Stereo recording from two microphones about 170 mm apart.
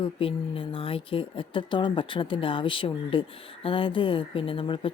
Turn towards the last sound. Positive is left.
turn(degrees=30)  # may be behind; listen again after turning